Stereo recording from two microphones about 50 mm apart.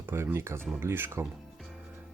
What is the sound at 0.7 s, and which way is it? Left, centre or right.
Speech, right.